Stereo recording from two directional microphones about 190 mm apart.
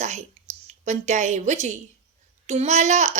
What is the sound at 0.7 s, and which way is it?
A child's voice, 40° right (ahead or behind).